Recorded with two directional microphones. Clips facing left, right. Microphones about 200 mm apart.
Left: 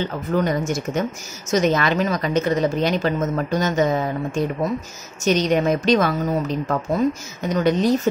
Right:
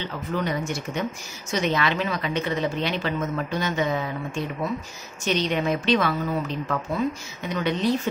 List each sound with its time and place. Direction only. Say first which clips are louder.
0.0 s a woman's voice: left 6 dB; 45° left (ahead or behind)